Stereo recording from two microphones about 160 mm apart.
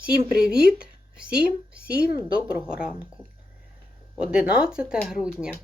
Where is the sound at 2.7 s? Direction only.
5° right (ahead or behind).